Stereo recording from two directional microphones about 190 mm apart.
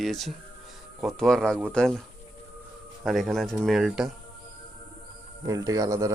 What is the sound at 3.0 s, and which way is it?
Speech, centre (ahead or behind).